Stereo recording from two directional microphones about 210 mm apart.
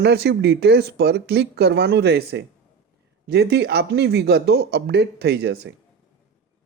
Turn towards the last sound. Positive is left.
turn(degrees=-50)  # may be behind; listen again after turning